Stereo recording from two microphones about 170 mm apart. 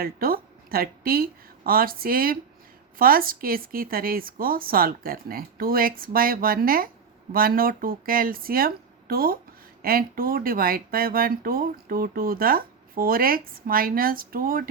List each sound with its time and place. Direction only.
0.0 s speech: 60° right (ahead or behind)